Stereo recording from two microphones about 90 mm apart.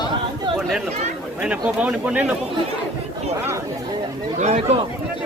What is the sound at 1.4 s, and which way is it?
Speech, 15° right (ahead or behind).